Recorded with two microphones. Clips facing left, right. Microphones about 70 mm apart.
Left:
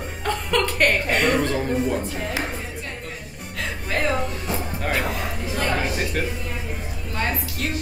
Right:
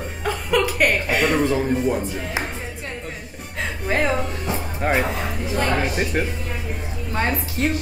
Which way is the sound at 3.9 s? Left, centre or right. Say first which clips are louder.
Right 3 dB; right.